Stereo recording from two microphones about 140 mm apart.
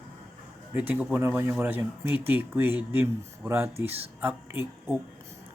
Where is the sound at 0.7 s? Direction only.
10° right (ahead or behind).